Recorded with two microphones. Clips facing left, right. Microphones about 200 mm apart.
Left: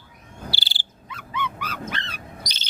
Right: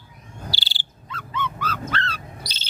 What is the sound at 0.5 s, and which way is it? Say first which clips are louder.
Cricket: even; 15° left (ahead or behind).